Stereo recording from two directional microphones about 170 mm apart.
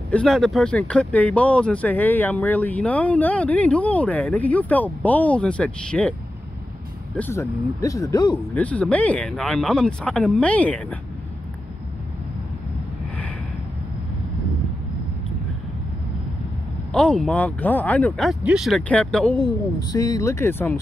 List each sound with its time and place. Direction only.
0.1 s speech: 5° left (ahead or behind)
7.2 s speech: 15° left (ahead or behind)
8.5 s speech: 5° left (ahead or behind)
16.9 s speech: 5° left (ahead or behind)
19.9 s speech: 20° left (ahead or behind)